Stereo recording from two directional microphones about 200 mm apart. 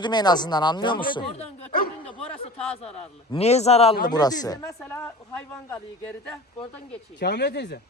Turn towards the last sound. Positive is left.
turn(degrees=55)  # may be behind; listen again after turning